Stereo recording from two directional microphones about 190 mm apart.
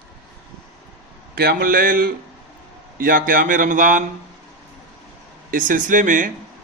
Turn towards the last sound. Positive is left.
turn(degrees=-45)  # may be behind; listen again after turning